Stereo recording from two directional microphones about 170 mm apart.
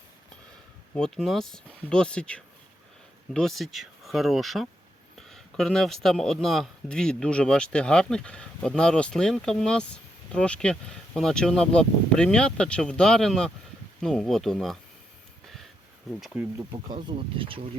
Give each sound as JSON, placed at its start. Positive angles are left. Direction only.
{"t": 0.9, "sound": "speech", "side_deg": 5}
{"t": 16.0, "sound": "speech", "side_deg": -5}
{"t": 16.7, "sound": "speech", "side_deg": -30}